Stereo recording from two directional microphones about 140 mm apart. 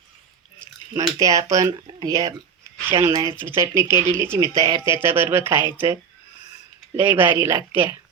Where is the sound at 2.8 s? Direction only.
15° right (ahead or behind).